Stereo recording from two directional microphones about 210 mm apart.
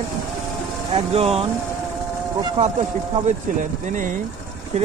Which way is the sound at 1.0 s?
30° right (ahead or behind).